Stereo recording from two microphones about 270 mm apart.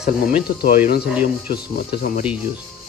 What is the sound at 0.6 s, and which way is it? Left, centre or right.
Speech, left.